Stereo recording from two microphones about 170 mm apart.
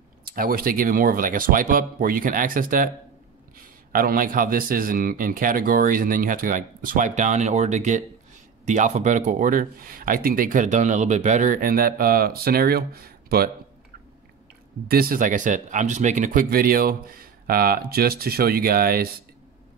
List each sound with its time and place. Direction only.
0.2 s a man's voice: 60° right (ahead or behind)
14.9 s a man's voice: 60° right (ahead or behind)